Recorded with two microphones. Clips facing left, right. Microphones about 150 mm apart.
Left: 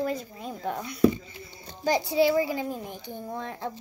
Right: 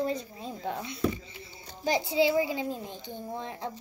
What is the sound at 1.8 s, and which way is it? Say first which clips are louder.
Speech: left 3 dB; 20° right (ahead or behind).